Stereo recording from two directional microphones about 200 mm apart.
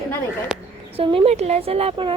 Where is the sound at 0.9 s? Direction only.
30° right (ahead or behind).